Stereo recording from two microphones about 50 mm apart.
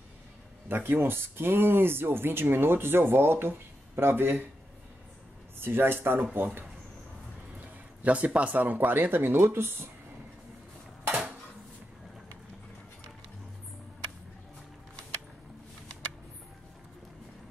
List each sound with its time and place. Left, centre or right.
0.7 s speech: right
5.6 s speech: right
8.0 s speech: right
11.1 s dishes: right